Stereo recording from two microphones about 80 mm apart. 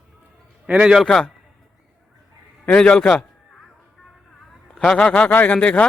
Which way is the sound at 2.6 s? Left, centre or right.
Centre.